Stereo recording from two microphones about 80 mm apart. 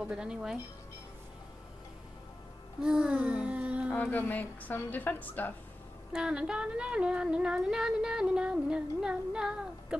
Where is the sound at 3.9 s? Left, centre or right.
Left.